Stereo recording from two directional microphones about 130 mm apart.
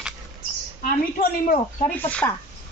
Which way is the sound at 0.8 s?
90° left.